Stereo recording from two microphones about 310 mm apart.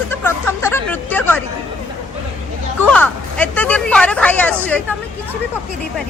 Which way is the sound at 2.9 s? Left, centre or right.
Centre.